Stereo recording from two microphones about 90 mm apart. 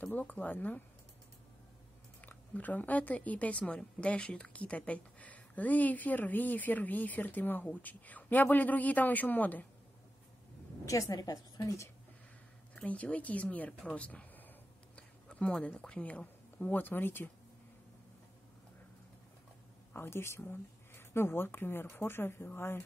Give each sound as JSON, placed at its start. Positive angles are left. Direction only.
{"t": 0.0, "sound": "speech", "side_deg": 20}
{"t": 2.2, "sound": "speech", "side_deg": 15}
{"t": 10.9, "sound": "a woman's voice", "side_deg": 40}
{"t": 12.7, "sound": "speech", "side_deg": 15}
{"t": 19.9, "sound": "speech", "side_deg": 25}